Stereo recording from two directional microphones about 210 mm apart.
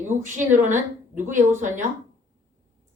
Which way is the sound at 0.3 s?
35° right (ahead or behind).